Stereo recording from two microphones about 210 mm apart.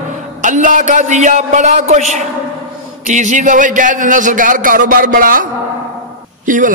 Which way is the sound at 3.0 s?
35° right (ahead or behind).